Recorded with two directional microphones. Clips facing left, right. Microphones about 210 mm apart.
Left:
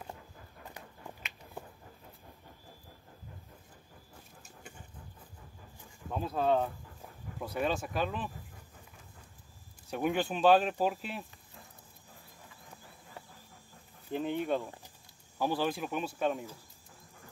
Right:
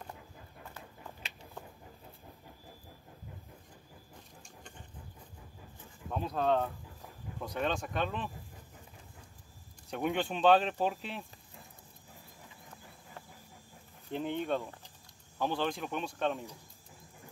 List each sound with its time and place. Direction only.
0.8 s a sound: 15° left (ahead or behind)
1.2 s a sound: 35° right (ahead or behind)
6.1 s speech: centre (ahead or behind)
9.8 s speech: centre (ahead or behind)
14.1 s speech: 5° left (ahead or behind)
14.6 s speech: 15° left (ahead or behind)